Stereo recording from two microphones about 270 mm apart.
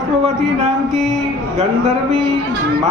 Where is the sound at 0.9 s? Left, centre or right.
Centre.